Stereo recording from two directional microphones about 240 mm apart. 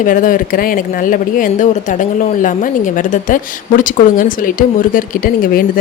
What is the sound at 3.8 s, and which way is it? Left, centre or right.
Speech, left.